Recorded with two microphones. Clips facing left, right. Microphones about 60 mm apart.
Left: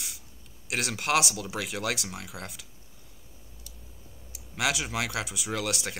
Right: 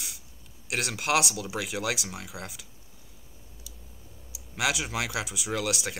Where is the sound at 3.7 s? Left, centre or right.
Left.